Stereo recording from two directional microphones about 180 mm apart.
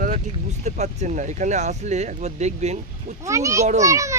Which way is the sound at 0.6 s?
40° right (ahead or behind).